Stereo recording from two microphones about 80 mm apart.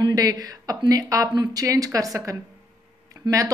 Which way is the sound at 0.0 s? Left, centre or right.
Right.